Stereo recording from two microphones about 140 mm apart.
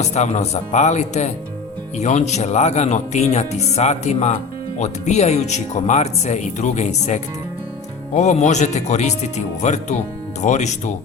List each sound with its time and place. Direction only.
0.0 s speech: 55° left (ahead or behind)